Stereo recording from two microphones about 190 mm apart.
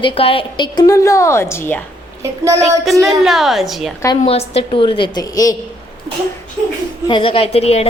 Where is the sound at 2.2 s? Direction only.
15° right (ahead or behind).